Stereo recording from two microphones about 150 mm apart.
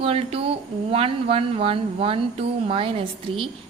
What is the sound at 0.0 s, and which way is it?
A woman's voice, 40° right (ahead or behind).